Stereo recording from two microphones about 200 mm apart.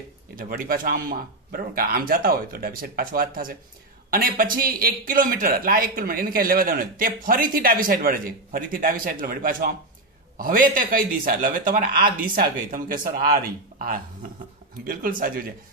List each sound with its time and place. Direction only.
0.4 s a man's voice: 45° right (ahead or behind)